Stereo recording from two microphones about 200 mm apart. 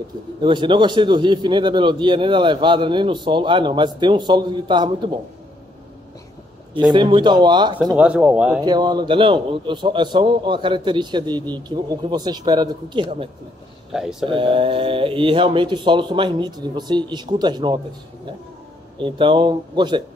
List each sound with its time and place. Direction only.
0.4 s a man's voice: 25° right (ahead or behind)
6.7 s a man's voice: 20° right (ahead or behind)
8.0 s speech: 5° right (ahead or behind)
8.5 s a man's voice: 20° right (ahead or behind)
14.2 s a man's voice: 25° right (ahead or behind)
18.9 s a man's voice: 25° right (ahead or behind)